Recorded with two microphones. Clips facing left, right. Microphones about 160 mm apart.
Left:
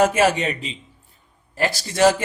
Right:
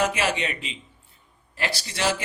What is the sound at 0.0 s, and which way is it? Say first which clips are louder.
Speech: left 7 dB; 45° left (ahead or behind).